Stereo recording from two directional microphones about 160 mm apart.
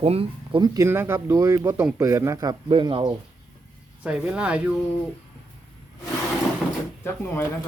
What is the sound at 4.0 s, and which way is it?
Speech, 5° right (ahead or behind).